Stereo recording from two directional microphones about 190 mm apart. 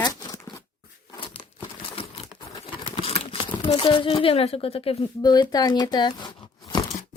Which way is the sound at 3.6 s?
25° left (ahead or behind).